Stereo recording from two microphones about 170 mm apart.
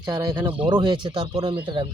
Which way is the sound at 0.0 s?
25° right (ahead or behind).